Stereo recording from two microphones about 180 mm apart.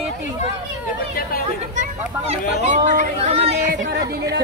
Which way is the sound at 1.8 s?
40° right (ahead or behind).